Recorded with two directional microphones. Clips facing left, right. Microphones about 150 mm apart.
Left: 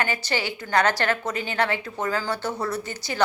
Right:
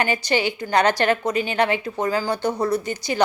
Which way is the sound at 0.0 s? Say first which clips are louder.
Right 5 dB; 15° right (ahead or behind).